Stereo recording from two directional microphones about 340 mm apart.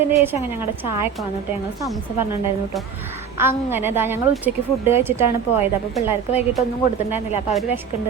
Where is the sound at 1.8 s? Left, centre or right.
Centre.